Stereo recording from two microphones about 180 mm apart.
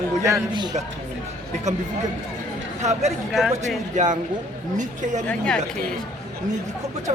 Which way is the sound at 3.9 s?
40° right (ahead or behind).